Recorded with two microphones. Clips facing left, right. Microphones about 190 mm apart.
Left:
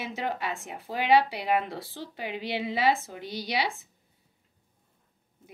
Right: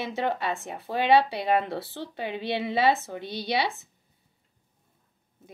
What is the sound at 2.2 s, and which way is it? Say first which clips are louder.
Speech: right 3 dB; 10° left (ahead or behind).